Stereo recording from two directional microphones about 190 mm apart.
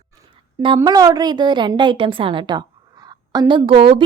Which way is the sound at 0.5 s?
25° right (ahead or behind).